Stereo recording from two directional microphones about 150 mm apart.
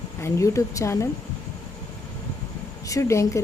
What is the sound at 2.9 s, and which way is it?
Speech, 20° left (ahead or behind).